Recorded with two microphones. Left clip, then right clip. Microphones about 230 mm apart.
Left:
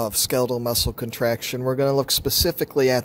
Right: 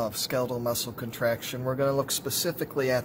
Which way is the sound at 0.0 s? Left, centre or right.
Left.